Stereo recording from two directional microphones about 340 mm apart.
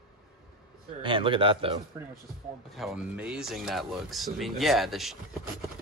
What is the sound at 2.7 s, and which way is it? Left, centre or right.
Speech, centre.